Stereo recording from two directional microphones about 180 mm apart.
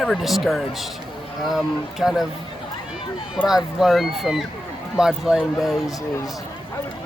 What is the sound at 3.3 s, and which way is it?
Speech, centre (ahead or behind).